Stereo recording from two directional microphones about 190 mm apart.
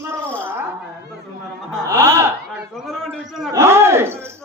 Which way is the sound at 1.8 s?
15° right (ahead or behind).